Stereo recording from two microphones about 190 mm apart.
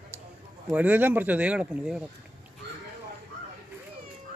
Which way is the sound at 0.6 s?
10° right (ahead or behind).